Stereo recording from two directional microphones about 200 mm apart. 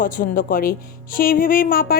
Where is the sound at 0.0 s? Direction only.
45° left (ahead or behind).